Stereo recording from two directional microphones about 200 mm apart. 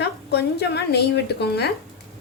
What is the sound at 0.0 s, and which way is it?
A woman's voice, 55° left (ahead or behind).